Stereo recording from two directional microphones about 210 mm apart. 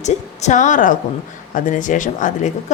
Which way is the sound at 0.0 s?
35° left (ahead or behind).